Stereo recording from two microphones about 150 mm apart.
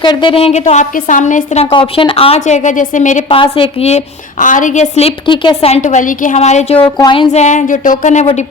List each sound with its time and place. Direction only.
0.0 s a woman's voice: 30° left (ahead or behind); by 1.6 s 55° left (ahead or behind)
1.7 s a woman's voice: 35° left (ahead or behind); by 3.2 s 55° left (ahead or behind)
3.2 s a woman's voice: 35° left (ahead or behind)
7.0 s a sound: 35° left (ahead or behind)
7.3 s a woman's voice: 50° left (ahead or behind)